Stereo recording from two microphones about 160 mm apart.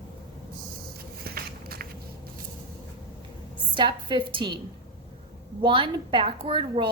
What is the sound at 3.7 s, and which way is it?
Speech, 30° right (ahead or behind).